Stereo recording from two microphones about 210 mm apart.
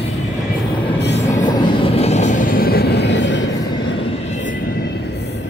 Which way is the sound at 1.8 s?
30° left (ahead or behind).